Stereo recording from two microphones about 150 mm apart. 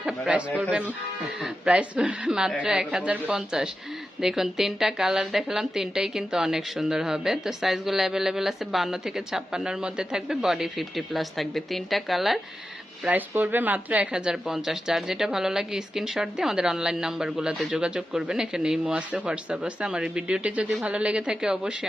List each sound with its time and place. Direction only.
0.0 s a man's voice: 5° right (ahead or behind)
13.1 s speech: 10° right (ahead or behind)